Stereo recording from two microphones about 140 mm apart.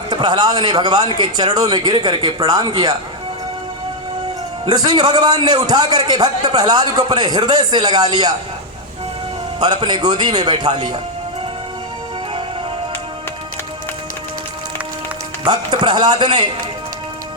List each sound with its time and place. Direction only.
0.1 s a man's voice: 30° right (ahead or behind)
4.6 s a man's voice: 30° right (ahead or behind)
9.6 s a man's voice: 30° right (ahead or behind)
15.4 s a man's voice: 30° right (ahead or behind)